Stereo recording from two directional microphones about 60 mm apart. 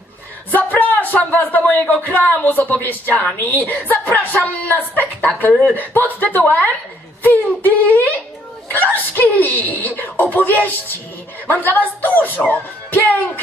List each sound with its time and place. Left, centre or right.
0.5 s speech: left